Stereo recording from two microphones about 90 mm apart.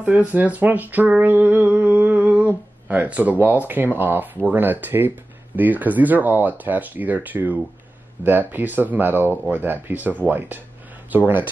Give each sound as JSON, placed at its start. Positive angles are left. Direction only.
{"t": 0.0, "sound": "speech", "side_deg": -15}